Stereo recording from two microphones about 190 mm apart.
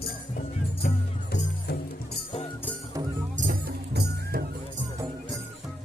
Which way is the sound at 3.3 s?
50° right (ahead or behind).